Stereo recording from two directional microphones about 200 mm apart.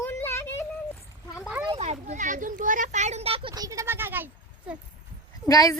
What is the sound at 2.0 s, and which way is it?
Speech, 40° right (ahead or behind).